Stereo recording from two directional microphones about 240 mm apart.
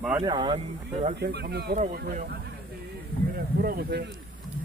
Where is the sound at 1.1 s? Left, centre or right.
Right.